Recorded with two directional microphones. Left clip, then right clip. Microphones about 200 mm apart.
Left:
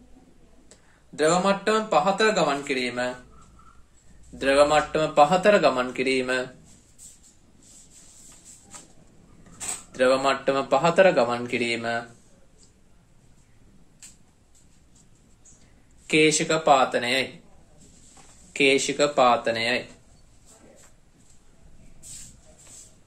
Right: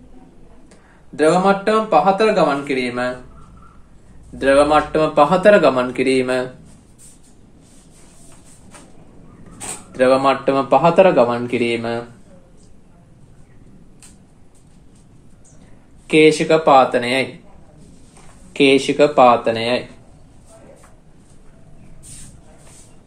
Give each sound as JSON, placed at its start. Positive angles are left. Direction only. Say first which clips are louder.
{"t": 1.1, "sound": "speech", "louder": "right 7 dB", "side_deg": 20}
{"t": 4.4, "sound": "speech", "louder": "right 6 dB", "side_deg": 20}
{"t": 9.9, "sound": "speech", "louder": "right 7 dB", "side_deg": 10}
{"t": 16.1, "sound": "speech", "louder": "right 8 dB", "side_deg": 10}
{"t": 18.5, "sound": "speech", "louder": "right 7 dB", "side_deg": -5}